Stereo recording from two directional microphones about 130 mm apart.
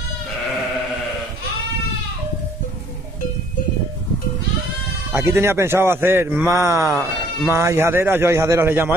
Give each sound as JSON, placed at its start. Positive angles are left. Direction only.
{"t": 5.1, "sound": "a man's voice", "side_deg": -20}